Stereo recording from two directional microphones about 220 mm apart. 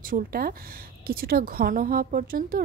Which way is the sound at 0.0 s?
40° right (ahead or behind).